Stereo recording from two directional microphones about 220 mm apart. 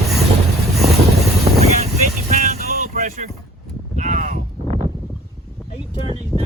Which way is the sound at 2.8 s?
35° right (ahead or behind).